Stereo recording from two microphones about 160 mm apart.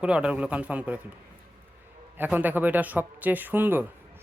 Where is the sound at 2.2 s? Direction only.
10° right (ahead or behind).